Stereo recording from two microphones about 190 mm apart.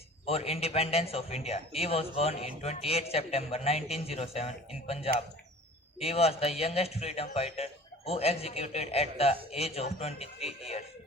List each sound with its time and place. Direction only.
0.3 s a man's voice: 30° left (ahead or behind)